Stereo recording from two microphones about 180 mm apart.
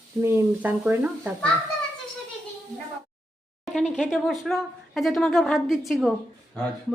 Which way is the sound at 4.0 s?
Centre (ahead or behind).